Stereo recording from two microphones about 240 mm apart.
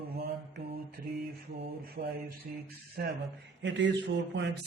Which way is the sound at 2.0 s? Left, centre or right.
Right.